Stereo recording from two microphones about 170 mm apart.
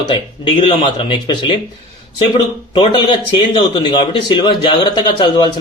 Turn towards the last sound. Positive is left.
turn(degrees=25)  # may be behind; listen again after turning